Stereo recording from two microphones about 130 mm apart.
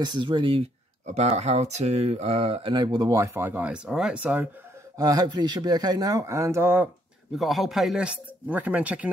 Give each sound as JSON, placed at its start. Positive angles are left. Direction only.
{"t": 0.0, "sound": "speech", "side_deg": -35}
{"t": 1.0, "sound": "speech", "side_deg": -55}
{"t": 4.9, "sound": "speech", "side_deg": -30}
{"t": 7.3, "sound": "speech", "side_deg": 0}